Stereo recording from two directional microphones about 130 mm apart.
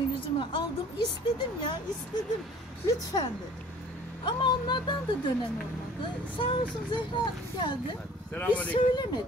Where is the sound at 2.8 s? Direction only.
30° left (ahead or behind).